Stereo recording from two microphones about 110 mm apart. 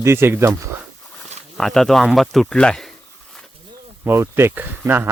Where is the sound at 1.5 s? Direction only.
5° left (ahead or behind).